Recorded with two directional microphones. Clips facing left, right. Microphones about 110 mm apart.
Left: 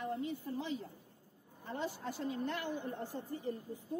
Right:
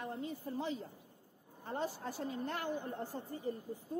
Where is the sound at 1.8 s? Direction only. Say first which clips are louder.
Even; 40° right (ahead or behind).